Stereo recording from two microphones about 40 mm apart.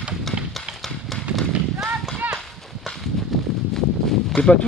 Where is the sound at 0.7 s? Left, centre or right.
Right.